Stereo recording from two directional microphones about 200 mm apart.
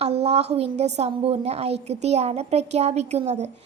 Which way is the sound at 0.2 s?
30° right (ahead or behind).